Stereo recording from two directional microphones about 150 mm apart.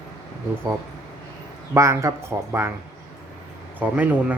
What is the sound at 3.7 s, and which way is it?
Speech, 10° right (ahead or behind).